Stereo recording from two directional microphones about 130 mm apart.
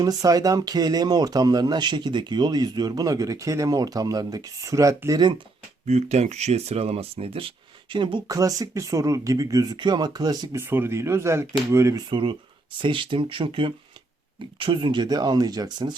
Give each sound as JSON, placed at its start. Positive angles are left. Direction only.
{"t": 0.0, "sound": "speech", "side_deg": -30}
{"t": 5.8, "sound": "speech", "side_deg": -60}
{"t": 8.3, "sound": "speech", "side_deg": -25}
{"t": 10.6, "sound": "speech", "side_deg": -15}
{"t": 12.0, "sound": "speech", "side_deg": -40}